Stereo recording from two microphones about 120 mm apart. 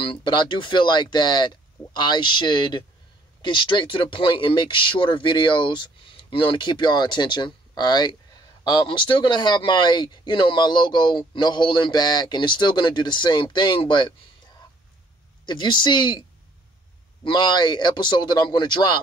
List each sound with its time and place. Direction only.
0.0 s speech: 45° left (ahead or behind)
15.4 s speech: 40° left (ahead or behind)